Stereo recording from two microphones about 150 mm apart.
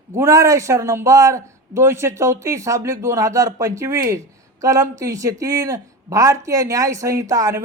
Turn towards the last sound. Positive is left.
turn(degrees=-20)  # may be behind; listen again after turning